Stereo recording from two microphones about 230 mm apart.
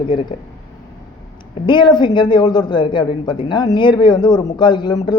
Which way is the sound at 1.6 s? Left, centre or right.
Centre.